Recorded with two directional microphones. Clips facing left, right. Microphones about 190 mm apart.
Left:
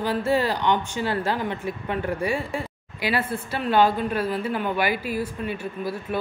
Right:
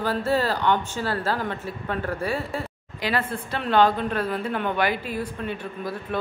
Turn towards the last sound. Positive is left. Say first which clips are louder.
# left 1 dB
turn(degrees=5)  # may be behind; listen again after turning